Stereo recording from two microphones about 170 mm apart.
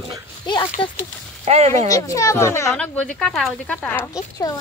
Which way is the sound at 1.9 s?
20° left (ahead or behind).